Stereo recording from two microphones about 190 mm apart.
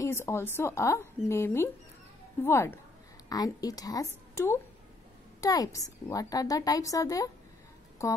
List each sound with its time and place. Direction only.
0.0 s a woman's voice: 15° left (ahead or behind)